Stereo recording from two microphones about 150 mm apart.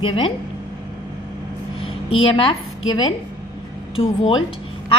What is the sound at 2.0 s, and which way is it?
Speech, 35° left (ahead or behind).